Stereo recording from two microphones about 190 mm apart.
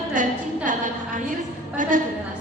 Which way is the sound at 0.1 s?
45° right (ahead or behind).